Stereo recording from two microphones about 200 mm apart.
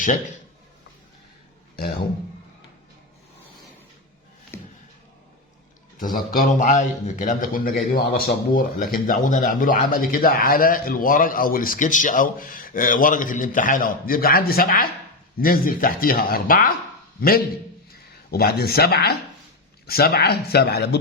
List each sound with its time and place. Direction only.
4.5 s music: 10° left (ahead or behind)
6.0 s speech: 45° left (ahead or behind)